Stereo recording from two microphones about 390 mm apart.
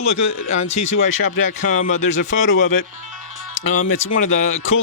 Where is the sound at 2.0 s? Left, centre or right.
Left.